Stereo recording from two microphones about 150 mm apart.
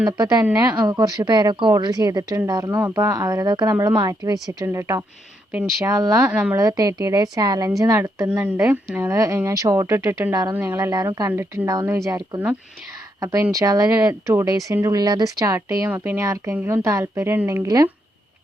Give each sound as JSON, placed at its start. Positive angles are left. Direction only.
{"t": 0.2, "sound": "speech", "side_deg": -25}
{"t": 5.5, "sound": "speech", "side_deg": -10}
{"t": 5.9, "sound": "speech", "side_deg": -25}
{"t": 6.2, "sound": "speech", "side_deg": -10}
{"t": 6.6, "sound": "speech", "side_deg": -25}
{"t": 8.3, "sound": "speech", "side_deg": -10}